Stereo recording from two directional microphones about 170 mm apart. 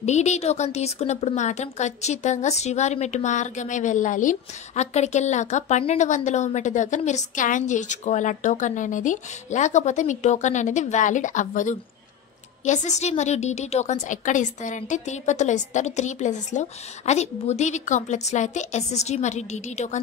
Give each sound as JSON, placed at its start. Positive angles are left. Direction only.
{"t": 0.0, "sound": "a woman's voice", "side_deg": 40}